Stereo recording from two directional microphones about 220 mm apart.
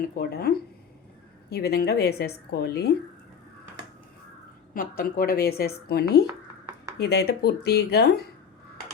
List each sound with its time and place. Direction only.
0.2 s speech: 45° left (ahead or behind)
4.7 s speech: 40° left (ahead or behind)
6.2 s a sound: 15° right (ahead or behind)
7.0 s speech: 50° left (ahead or behind)